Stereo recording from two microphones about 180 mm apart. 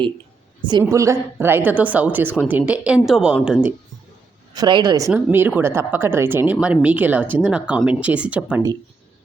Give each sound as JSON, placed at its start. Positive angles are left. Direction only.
{"t": 0.6, "sound": "speech", "side_deg": -25}
{"t": 4.5, "sound": "a woman's voice", "side_deg": -20}
{"t": 5.1, "sound": "speech", "side_deg": -10}